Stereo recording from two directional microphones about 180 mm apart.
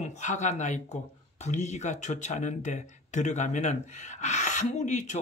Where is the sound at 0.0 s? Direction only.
40° left (ahead or behind).